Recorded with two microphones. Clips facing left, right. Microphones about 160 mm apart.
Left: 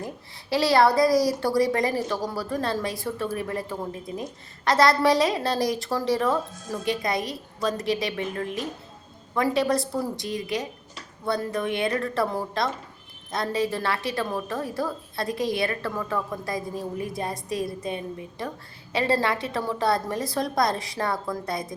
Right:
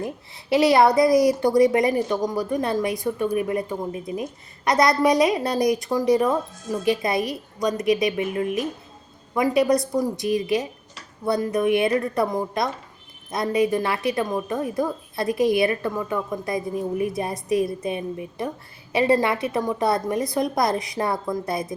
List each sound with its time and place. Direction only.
0.5 s a woman's voice: 20° right (ahead or behind)